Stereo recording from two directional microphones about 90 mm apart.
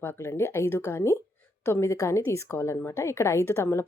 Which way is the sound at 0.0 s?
25° left (ahead or behind).